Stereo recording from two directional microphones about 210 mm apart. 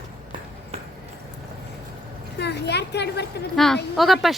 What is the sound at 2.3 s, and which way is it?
Speech, 55° left (ahead or behind).